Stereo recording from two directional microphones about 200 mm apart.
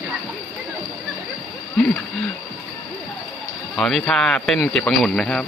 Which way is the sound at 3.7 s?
5° left (ahead or behind).